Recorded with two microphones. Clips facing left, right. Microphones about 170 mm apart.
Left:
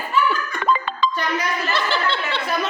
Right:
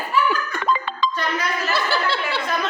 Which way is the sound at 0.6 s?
55° left (ahead or behind).